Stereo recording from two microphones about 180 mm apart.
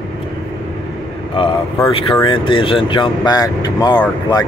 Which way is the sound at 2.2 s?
30° left (ahead or behind).